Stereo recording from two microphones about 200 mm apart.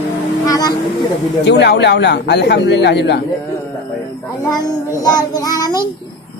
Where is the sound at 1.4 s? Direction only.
60° left (ahead or behind).